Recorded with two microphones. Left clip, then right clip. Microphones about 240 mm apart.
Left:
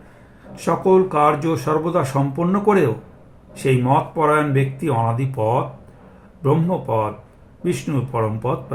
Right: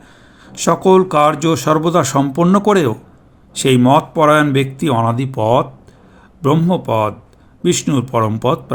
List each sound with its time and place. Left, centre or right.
0.6 s speech: right